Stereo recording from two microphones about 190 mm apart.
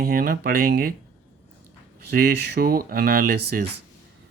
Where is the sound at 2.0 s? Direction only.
55° right (ahead or behind).